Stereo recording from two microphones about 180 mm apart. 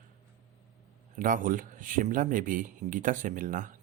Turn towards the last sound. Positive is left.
turn(degrees=-50)  # may be behind; listen again after turning